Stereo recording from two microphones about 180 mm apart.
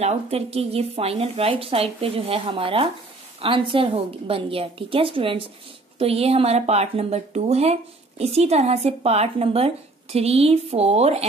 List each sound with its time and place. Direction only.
0.0 s speech: 35° right (ahead or behind)